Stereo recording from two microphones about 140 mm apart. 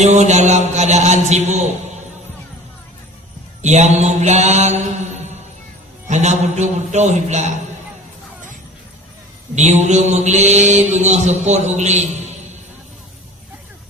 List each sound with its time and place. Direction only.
0.0 s mantra: 55° right (ahead or behind)
3.6 s mantra: 55° right (ahead or behind)
6.1 s mantra: 55° right (ahead or behind)
9.6 s mantra: 55° right (ahead or behind)